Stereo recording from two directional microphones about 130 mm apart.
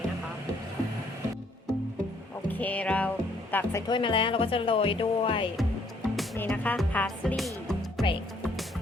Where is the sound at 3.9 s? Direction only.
40° left (ahead or behind).